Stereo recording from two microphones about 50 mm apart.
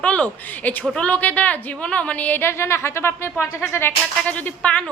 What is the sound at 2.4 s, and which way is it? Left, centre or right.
A woman's voice, left.